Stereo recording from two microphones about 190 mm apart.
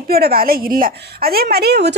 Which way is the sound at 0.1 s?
55° right (ahead or behind).